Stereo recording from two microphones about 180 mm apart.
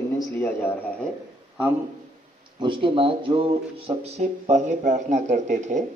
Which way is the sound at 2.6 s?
25° right (ahead or behind).